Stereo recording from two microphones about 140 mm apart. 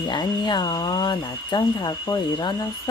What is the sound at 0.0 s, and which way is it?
Speech, 30° left (ahead or behind).